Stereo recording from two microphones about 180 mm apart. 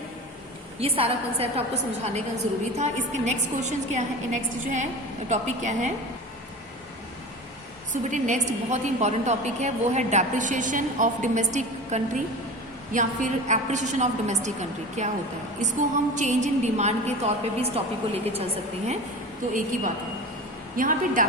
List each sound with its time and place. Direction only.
0.8 s a woman's voice: 30° right (ahead or behind)
8.1 s a woman's voice: 40° right (ahead or behind)
19.5 s a woman's voice: 45° right (ahead or behind)